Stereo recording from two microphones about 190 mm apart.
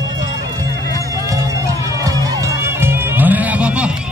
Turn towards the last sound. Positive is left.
turn(degrees=-5)  # may be behind; listen again after turning